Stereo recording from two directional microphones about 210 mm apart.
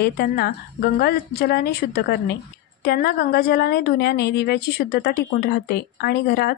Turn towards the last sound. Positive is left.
turn(degrees=50)  # may be behind; listen again after turning